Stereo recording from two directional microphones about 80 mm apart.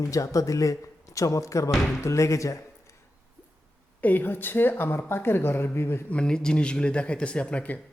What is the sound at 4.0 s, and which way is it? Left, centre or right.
Speech, left.